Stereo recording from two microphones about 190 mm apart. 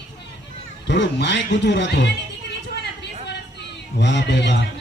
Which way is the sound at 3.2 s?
65° left (ahead or behind).